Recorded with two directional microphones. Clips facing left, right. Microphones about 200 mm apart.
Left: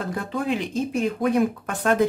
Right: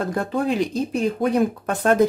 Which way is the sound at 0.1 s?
40° right (ahead or behind).